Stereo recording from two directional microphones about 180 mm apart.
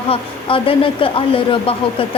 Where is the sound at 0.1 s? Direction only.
30° left (ahead or behind).